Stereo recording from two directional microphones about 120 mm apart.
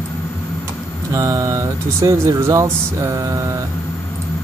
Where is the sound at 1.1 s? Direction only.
30° right (ahead or behind).